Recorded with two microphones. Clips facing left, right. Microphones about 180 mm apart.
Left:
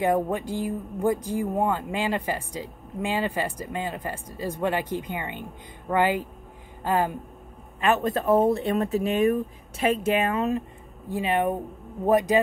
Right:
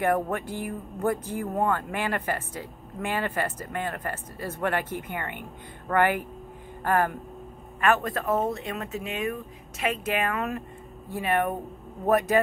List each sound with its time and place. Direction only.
0.0 s speech: 15° left (ahead or behind)